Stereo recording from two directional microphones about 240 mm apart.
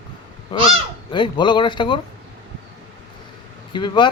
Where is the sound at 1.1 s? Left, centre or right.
Centre.